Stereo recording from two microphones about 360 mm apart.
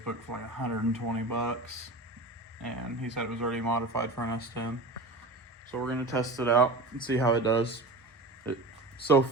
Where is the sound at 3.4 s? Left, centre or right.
Right.